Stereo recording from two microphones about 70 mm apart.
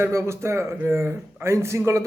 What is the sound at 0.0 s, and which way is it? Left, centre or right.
A man's voice, right.